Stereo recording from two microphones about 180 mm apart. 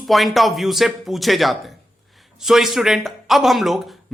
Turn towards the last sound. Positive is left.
turn(degrees=0)  # may be behind; listen again after turning